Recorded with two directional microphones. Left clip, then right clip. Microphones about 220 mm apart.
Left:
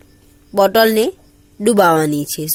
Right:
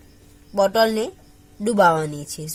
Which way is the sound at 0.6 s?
35° left (ahead or behind).